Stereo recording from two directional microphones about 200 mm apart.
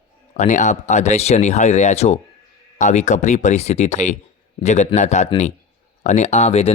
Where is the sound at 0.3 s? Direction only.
35° left (ahead or behind).